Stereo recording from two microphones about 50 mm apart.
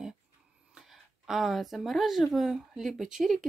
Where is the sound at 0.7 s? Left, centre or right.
Centre.